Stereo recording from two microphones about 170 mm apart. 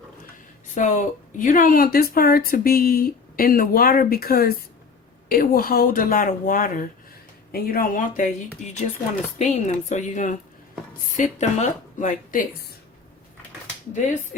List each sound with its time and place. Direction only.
0.7 s speech: 45° left (ahead or behind)